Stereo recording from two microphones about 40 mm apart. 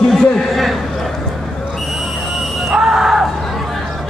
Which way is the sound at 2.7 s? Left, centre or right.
Centre.